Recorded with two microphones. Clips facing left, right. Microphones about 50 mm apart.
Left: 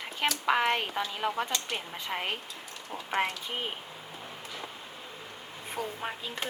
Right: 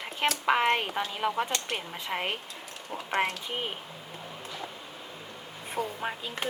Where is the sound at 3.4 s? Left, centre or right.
Centre.